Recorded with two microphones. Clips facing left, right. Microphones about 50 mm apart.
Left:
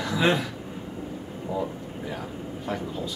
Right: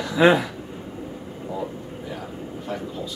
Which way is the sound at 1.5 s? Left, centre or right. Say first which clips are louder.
Left 1 dB; centre.